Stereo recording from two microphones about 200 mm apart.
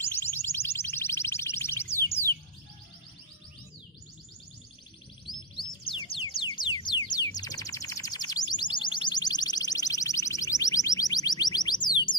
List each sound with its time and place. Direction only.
0.0 s music: 10° left (ahead or behind)
5.6 s music: 25° left (ahead or behind)